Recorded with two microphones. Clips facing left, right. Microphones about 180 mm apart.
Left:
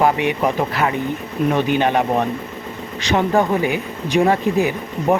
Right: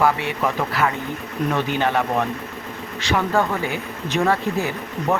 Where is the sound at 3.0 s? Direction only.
20° left (ahead or behind).